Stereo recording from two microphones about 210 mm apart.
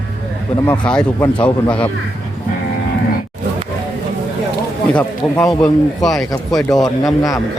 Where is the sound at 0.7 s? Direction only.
5° left (ahead or behind).